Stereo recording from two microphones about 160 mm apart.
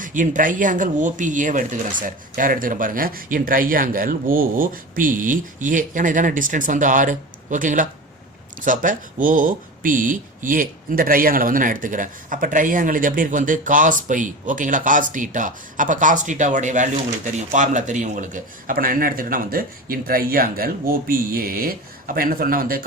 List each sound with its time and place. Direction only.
0.0 s speech: 55° right (ahead or behind)